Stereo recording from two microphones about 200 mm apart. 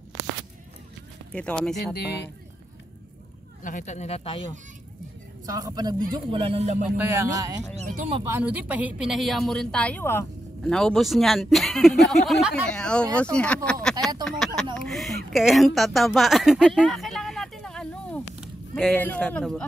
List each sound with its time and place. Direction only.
1.3 s a woman's voice: 5° left (ahead or behind)
3.6 s speech: 40° left (ahead or behind)
5.5 s speech: 20° right (ahead or behind); by 6.9 s 35° right (ahead or behind)
7.3 s speech: 20° right (ahead or behind)
7.7 s speech: 35° right (ahead or behind)
8.2 s a woman's voice: 10° right (ahead or behind); by 13.6 s 5° left (ahead or behind)
14.2 s a sound: centre (ahead or behind)
19.0 s a woman's voice: 5° left (ahead or behind)